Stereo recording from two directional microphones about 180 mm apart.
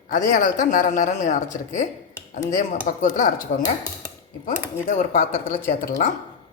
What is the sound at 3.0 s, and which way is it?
Speech, 50° left (ahead or behind).